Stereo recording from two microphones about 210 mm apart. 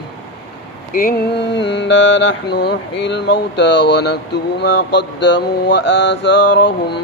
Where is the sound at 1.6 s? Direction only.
55° left (ahead or behind).